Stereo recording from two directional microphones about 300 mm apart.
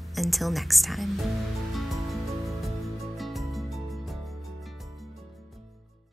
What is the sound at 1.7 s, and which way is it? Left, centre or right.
Music, centre.